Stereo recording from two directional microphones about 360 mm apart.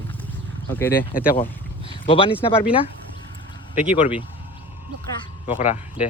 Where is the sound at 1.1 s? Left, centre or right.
Left.